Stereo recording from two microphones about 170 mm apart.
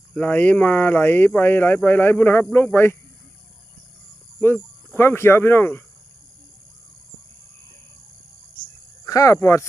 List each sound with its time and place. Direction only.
0.1 s speech: 10° left (ahead or behind)
4.4 s speech: 10° left (ahead or behind)
9.0 s speech: 20° left (ahead or behind)